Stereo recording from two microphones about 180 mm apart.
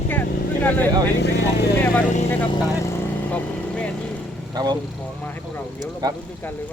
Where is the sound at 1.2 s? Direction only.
70° left (ahead or behind).